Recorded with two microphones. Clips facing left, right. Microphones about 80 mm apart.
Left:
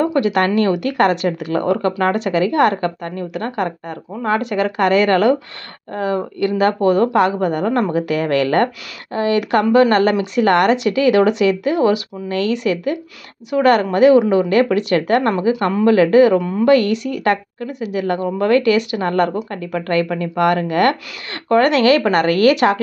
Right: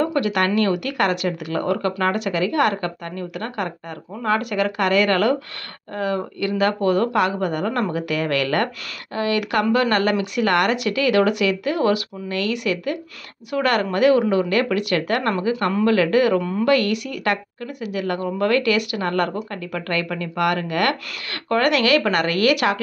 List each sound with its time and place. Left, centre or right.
0.0 s speech: left
16.6 s speech: left